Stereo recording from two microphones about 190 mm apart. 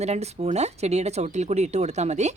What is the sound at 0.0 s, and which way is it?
Speech, 35° right (ahead or behind).